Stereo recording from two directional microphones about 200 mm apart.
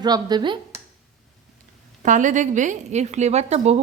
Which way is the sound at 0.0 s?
20° right (ahead or behind).